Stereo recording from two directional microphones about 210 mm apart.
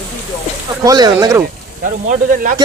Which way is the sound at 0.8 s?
15° right (ahead or behind).